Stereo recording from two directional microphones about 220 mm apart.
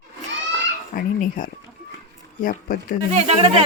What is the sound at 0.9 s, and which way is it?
Speech, 40° left (ahead or behind).